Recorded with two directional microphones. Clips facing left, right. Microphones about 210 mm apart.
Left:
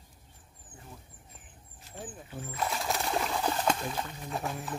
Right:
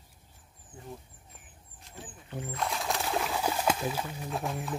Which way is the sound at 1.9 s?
5° left (ahead or behind).